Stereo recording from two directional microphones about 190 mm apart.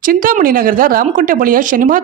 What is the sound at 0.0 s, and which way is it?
Speech, 45° right (ahead or behind).